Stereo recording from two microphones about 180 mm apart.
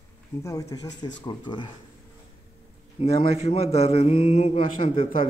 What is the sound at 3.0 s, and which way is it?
A man's voice, 35° left (ahead or behind).